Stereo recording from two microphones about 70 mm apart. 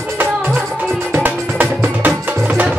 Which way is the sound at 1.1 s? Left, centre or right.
Right.